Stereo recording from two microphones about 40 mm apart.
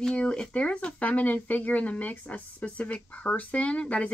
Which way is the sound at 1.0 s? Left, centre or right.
Left.